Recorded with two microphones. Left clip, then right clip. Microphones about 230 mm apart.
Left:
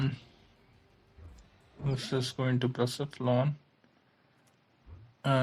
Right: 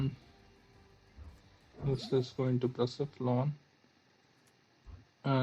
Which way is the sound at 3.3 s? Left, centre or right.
Left.